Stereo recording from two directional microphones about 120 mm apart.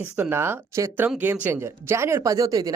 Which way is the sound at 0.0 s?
15° right (ahead or behind).